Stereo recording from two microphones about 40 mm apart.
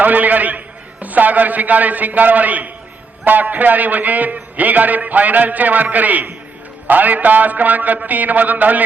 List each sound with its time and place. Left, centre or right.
0.0 s a man's voice: right